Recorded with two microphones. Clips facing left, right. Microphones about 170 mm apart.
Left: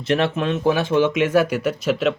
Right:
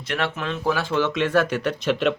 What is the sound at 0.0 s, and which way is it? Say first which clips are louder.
Speech: left 7 dB; 25° left (ahead or behind).